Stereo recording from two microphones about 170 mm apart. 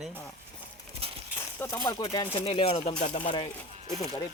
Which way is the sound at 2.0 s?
30° left (ahead or behind).